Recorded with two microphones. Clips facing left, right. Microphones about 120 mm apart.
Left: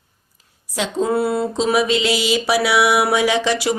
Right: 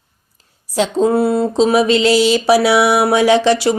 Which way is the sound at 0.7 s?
35° right (ahead or behind).